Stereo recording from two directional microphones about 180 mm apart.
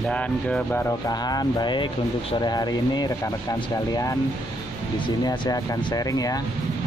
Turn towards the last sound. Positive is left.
turn(degrees=20)  # may be behind; listen again after turning